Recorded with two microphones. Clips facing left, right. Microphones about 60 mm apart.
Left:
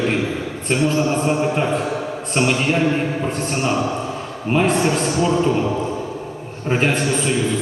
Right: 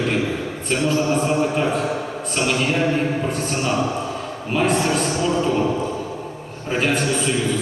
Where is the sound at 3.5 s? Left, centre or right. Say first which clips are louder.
Left 3 dB; left.